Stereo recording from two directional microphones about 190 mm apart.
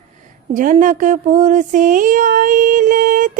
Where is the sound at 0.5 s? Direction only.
45° right (ahead or behind).